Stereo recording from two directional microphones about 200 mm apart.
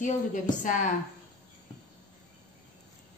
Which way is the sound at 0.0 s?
40° left (ahead or behind).